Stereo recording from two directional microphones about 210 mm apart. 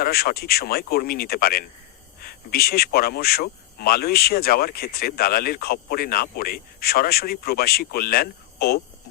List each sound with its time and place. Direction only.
0.0 s speech: 45° left (ahead or behind)